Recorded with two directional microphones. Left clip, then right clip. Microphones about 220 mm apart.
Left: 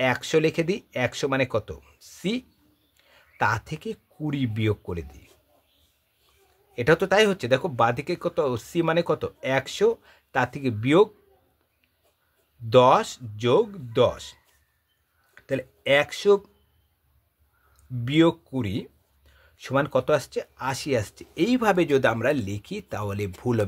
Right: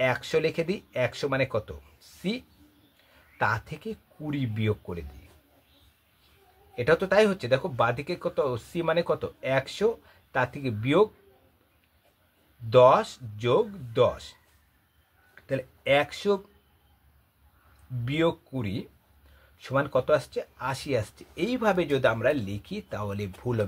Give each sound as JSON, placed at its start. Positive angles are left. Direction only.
{"t": 0.0, "sound": "speech", "side_deg": 40}
{"t": 6.7, "sound": "speech", "side_deg": 45}
{"t": 12.6, "sound": "speech", "side_deg": 40}
{"t": 15.3, "sound": "speech", "side_deg": 40}
{"t": 18.0, "sound": "speech", "side_deg": 40}